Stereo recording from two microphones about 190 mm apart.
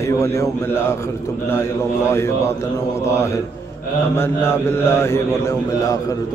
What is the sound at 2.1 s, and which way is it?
A man's voice, 15° left (ahead or behind).